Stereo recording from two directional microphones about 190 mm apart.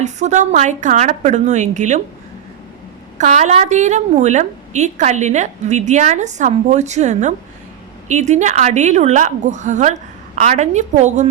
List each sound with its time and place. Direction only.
0.0 s a woman's voice: 40° right (ahead or behind)
3.2 s a woman's voice: 40° right (ahead or behind)